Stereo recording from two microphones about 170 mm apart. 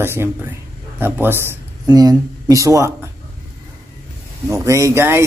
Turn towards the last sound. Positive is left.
turn(degrees=-15)  # may be behind; listen again after turning